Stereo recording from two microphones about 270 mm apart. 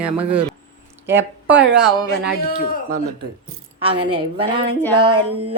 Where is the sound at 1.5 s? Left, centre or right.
Centre.